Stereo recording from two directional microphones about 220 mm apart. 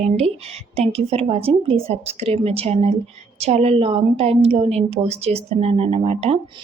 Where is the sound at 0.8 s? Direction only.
25° right (ahead or behind).